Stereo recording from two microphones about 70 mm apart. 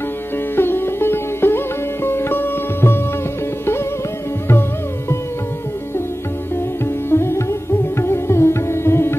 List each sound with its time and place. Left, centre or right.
0.6 s music: left
2.0 s sitar: left
7.1 s music: left
8.0 s sitar: left